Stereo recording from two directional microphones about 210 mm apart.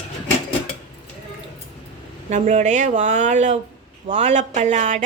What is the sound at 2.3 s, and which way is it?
Speech, 35° right (ahead or behind).